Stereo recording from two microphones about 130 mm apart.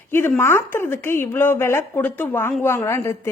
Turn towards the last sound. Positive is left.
turn(degrees=20)  # may be behind; listen again after turning